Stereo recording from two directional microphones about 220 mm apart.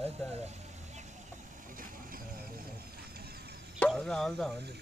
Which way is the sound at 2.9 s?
45° right (ahead or behind).